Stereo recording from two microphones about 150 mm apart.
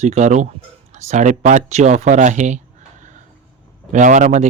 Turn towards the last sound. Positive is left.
turn(degrees=-55)  # may be behind; listen again after turning